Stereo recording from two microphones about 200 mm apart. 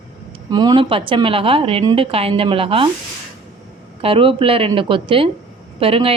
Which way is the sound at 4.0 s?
25° right (ahead or behind).